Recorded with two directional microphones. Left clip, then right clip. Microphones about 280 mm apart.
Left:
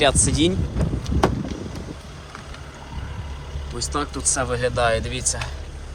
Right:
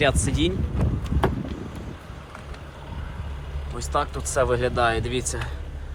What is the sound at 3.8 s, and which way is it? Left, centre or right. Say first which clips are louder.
Speech: even; centre.